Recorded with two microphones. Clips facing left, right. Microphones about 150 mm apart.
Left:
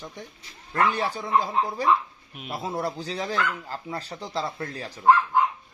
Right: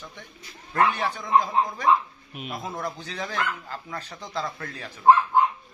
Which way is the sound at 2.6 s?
35° left (ahead or behind).